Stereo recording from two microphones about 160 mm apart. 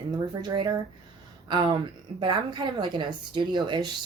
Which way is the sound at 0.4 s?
25° right (ahead or behind).